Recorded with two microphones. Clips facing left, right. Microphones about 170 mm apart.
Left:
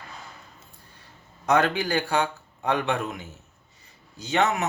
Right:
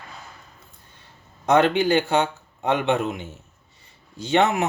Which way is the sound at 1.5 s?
25° right (ahead or behind).